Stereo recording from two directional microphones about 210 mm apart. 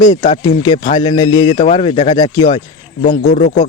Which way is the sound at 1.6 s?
30° left (ahead or behind).